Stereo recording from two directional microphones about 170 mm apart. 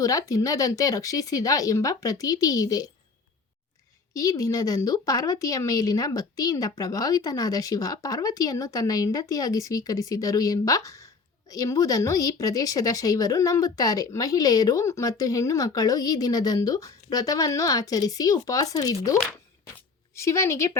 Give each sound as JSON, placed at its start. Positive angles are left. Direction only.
{"t": 0.0, "sound": "speech", "side_deg": 20}
{"t": 4.1, "sound": "speech", "side_deg": 20}
{"t": 20.1, "sound": "a woman's voice", "side_deg": 15}